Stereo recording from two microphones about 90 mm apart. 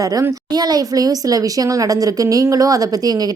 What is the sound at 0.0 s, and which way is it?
Speech, 40° right (ahead or behind).